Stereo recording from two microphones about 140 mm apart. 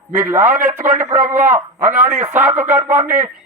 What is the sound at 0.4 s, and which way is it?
Speech, 65° right (ahead or behind).